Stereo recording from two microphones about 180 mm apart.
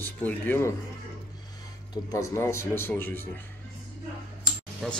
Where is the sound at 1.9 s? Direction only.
15° left (ahead or behind).